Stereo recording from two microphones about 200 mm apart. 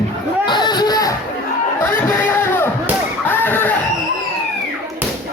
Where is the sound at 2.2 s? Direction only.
10° left (ahead or behind).